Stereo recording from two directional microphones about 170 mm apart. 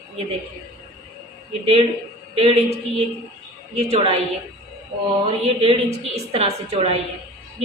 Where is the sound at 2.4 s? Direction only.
35° right (ahead or behind).